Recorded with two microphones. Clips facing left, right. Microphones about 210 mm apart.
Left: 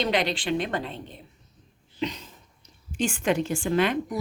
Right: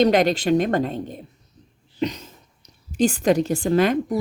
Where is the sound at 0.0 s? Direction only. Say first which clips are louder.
Right 9 dB; 45° right (ahead or behind).